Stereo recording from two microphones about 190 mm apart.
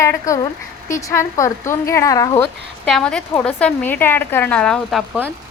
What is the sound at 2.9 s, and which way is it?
A woman's voice, 5° left (ahead or behind).